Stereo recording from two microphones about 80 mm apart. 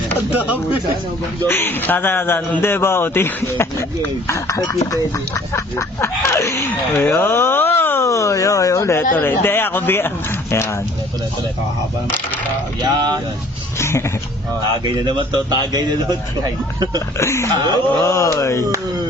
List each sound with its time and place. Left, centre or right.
0.3 s speech: centre
1.5 s speech: left
8.0 s speech: left
12.8 s speech: right
13.7 s speech: left
15.0 s a man's voice: right
17.2 s speech: left